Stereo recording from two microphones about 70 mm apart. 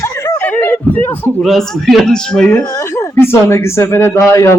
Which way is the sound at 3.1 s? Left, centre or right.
Left.